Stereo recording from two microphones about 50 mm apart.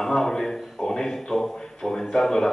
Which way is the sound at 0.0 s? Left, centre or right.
Centre.